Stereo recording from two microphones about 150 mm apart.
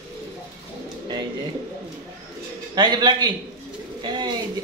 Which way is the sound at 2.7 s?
30° right (ahead or behind).